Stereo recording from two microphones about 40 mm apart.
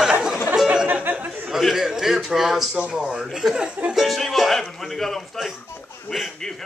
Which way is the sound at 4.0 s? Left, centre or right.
Centre.